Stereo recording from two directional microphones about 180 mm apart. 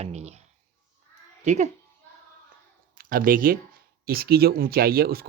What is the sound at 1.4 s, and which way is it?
Speech, 40° right (ahead or behind).